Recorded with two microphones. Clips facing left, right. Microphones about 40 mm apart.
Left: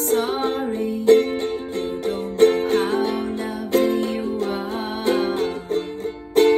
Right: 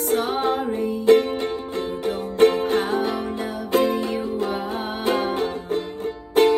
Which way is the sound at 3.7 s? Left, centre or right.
Right.